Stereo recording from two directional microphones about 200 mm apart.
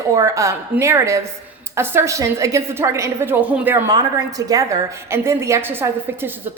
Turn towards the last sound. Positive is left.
turn(degrees=-10)  # may be behind; listen again after turning